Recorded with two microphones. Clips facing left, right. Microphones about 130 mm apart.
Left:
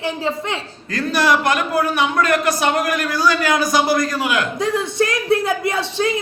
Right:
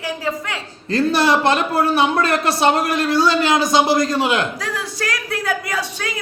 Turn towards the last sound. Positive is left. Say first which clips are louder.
# left 6 dB
turn(degrees=25)  # may be behind; listen again after turning